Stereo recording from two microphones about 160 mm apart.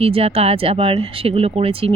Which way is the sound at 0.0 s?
35° right (ahead or behind).